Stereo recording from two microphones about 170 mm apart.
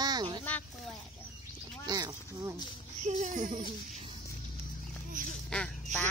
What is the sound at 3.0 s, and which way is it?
Speech, 50° right (ahead or behind).